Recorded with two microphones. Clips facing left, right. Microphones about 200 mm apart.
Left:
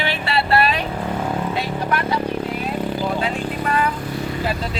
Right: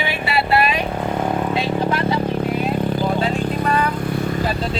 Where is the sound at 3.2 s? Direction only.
35° right (ahead or behind).